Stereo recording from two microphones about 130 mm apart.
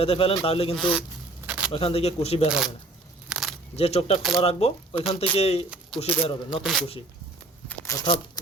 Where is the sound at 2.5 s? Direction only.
5° right (ahead or behind).